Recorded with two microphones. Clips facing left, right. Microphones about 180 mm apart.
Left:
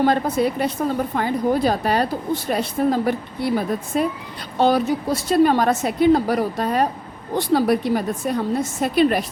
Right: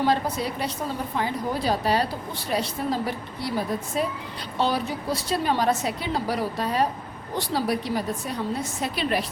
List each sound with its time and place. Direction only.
0.0 s a woman's voice: 55° left (ahead or behind)